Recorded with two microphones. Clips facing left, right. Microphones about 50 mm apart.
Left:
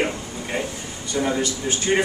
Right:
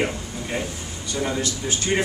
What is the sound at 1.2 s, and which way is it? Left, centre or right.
Speech, centre.